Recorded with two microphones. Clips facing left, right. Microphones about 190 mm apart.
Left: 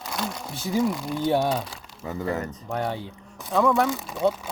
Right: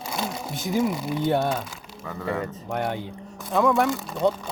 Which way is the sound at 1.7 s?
25° left (ahead or behind).